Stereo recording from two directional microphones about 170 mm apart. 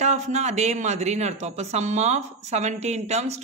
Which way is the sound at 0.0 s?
45° right (ahead or behind).